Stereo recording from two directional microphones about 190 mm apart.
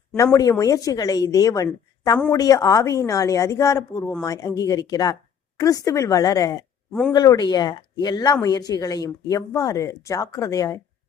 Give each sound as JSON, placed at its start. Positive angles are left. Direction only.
{"t": 0.3, "sound": "a woman's voice", "side_deg": 20}